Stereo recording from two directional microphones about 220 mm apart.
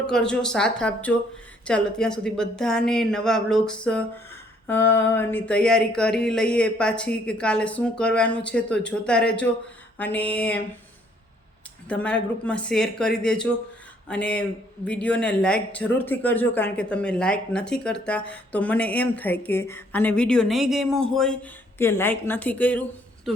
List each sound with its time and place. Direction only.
0.1 s speech: 5° left (ahead or behind)
11.9 s speech: 5° left (ahead or behind)